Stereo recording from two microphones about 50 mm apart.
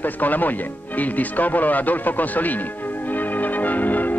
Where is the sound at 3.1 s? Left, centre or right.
Left.